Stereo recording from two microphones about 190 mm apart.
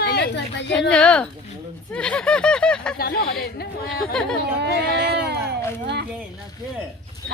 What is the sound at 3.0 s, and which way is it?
Speech, 55° left (ahead or behind).